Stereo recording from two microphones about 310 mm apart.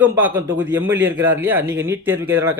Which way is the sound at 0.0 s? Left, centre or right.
Centre.